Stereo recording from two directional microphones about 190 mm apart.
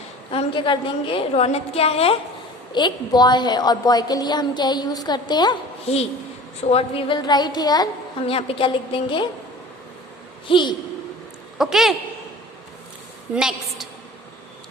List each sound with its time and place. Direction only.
0.3 s a woman's voice: 30° left (ahead or behind)
10.5 s a woman's voice: 25° left (ahead or behind)
11.5 s a woman's voice: centre (ahead or behind)
13.3 s a woman's voice: centre (ahead or behind)